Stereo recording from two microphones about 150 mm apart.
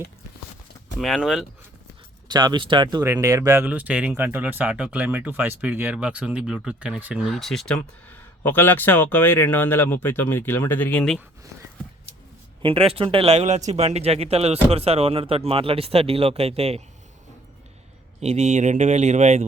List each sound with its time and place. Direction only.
0.9 s speech: centre (ahead or behind)
2.2 s speech: 30° right (ahead or behind)
3.0 s speech: 20° right (ahead or behind); by 11.2 s 5° left (ahead or behind)
12.6 s speech: 35° right (ahead or behind)
18.2 s speech: 50° right (ahead or behind)